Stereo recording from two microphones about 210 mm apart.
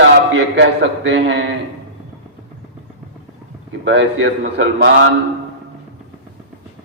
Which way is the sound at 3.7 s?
60° right (ahead or behind).